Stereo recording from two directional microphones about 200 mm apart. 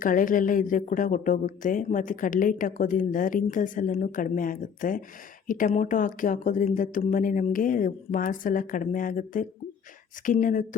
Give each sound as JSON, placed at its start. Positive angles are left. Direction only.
{"t": 0.0, "sound": "a woman's voice", "side_deg": 40}